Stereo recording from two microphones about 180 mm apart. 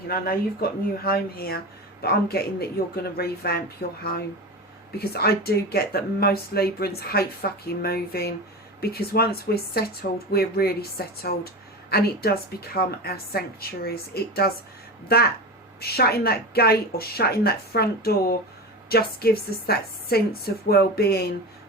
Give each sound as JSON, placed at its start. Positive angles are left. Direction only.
{"t": 0.1, "sound": "speech", "side_deg": 55}